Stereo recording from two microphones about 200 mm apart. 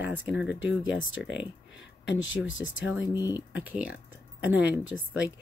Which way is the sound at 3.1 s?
20° left (ahead or behind).